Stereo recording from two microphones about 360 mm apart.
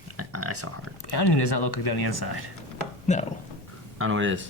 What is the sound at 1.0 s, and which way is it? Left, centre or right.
Speech, left.